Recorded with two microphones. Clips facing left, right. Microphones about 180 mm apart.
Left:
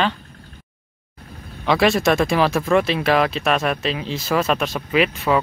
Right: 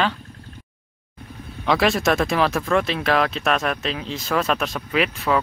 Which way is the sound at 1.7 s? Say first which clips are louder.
Left 2 dB; centre (ahead or behind).